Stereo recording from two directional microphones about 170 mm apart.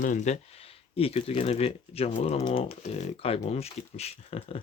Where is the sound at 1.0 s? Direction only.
35° left (ahead or behind).